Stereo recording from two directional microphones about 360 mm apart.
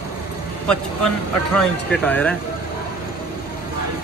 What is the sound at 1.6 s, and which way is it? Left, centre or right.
Speech, centre.